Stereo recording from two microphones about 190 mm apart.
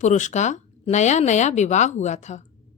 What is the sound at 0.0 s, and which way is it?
Speech, 40° left (ahead or behind).